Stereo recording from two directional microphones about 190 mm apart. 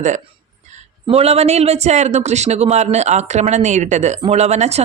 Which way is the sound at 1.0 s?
30° right (ahead or behind).